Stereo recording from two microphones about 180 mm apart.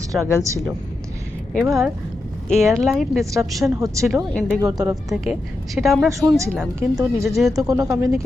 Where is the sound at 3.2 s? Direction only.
15° right (ahead or behind).